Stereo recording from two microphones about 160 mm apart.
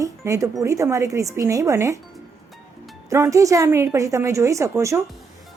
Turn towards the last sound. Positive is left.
turn(degrees=-20)  # may be behind; listen again after turning